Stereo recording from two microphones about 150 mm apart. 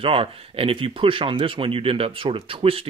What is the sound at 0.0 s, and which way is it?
Speech, 40° right (ahead or behind).